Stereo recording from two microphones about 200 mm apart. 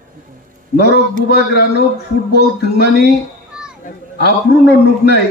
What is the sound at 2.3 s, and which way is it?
Speech, 55° left (ahead or behind).